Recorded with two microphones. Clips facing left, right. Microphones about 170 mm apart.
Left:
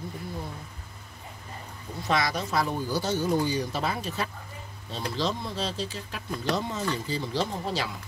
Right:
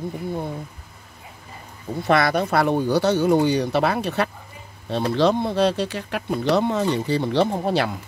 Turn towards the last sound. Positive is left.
turn(degrees=-60)  # may be behind; listen again after turning